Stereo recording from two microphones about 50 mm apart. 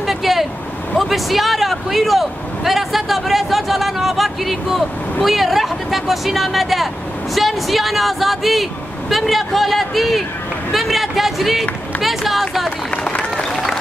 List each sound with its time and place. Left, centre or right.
0.0 s vehicle: centre
0.9 s speech: centre
12.9 s run: left